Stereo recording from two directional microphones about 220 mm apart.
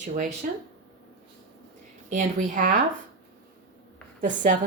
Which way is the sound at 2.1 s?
35° right (ahead or behind).